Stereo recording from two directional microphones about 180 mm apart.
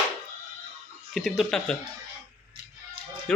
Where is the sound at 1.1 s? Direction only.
Centre (ahead or behind).